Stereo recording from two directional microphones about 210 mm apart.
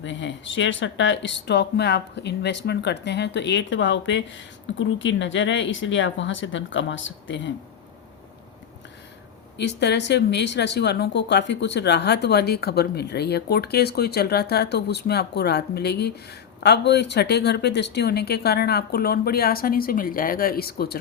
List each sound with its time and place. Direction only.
0.0 s speech: 60° left (ahead or behind)
9.6 s speech: 55° left (ahead or behind)